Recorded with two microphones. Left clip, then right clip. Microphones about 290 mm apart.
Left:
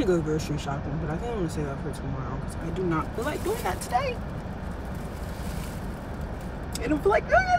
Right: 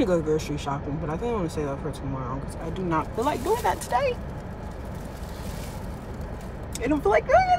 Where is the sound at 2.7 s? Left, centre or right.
Centre.